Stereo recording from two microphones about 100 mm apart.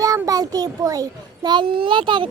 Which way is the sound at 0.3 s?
40° right (ahead or behind).